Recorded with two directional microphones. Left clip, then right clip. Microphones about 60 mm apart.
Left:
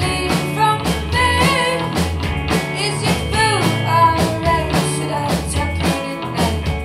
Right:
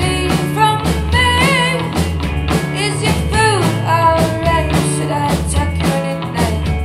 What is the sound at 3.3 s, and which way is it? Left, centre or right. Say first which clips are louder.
Music: right 3 dB; right.